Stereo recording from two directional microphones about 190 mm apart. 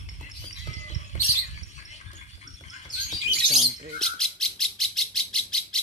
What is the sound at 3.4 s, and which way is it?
Bird, 35° right (ahead or behind).